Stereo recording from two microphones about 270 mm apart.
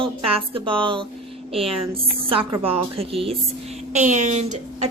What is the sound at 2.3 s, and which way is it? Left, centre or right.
A woman's voice, centre.